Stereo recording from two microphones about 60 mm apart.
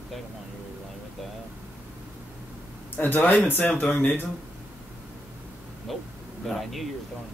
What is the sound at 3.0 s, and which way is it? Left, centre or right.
Speech, left.